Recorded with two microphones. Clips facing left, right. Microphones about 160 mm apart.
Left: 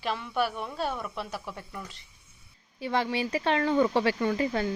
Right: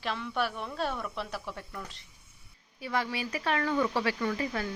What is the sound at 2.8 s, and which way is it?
Speech, 30° left (ahead or behind).